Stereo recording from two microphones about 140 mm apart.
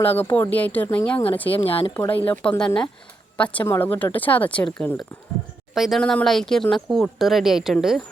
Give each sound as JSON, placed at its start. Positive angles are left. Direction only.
{"t": 0.0, "sound": "speech", "side_deg": 15}
{"t": 1.5, "sound": "speech", "side_deg": 40}
{"t": 1.9, "sound": "speech", "side_deg": 15}